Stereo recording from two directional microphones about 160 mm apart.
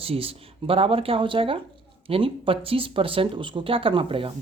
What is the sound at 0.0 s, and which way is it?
Speech, 35° right (ahead or behind).